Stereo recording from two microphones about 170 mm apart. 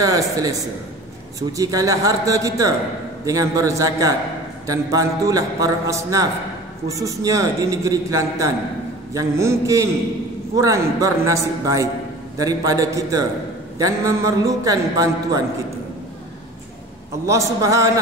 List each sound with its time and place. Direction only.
0.0 s a man's voice: 20° right (ahead or behind)
1.6 s a man's voice: 20° right (ahead or behind)
9.1 s mantra: 15° right (ahead or behind)
10.5 s a man's voice: 20° right (ahead or behind)
17.3 s a man's voice: 20° right (ahead or behind)